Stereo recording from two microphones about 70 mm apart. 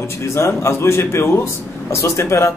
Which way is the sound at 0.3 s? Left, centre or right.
Left.